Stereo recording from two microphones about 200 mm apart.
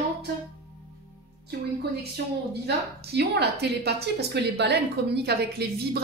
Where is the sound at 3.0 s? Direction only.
55° right (ahead or behind).